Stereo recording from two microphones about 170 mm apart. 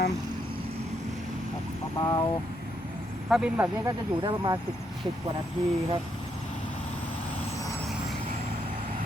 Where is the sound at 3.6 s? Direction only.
20° right (ahead or behind).